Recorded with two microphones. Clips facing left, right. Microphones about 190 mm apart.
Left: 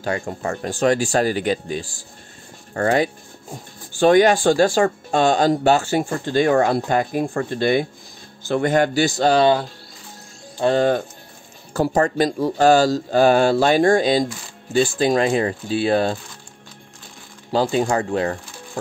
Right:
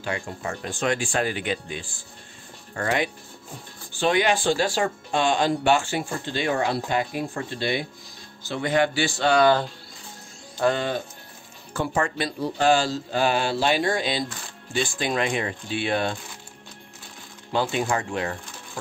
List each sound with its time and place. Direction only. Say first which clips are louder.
0.0 s speech: left 6 dB; 45° left (ahead or behind)
10.6 s speech: left 3 dB; 25° left (ahead or behind)
11.7 s speech: left 7 dB; 40° left (ahead or behind)
17.5 s speech: left 5 dB; 35° left (ahead or behind)